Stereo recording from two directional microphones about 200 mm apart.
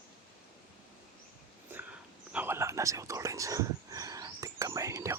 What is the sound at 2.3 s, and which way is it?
Whispering, 10° right (ahead or behind).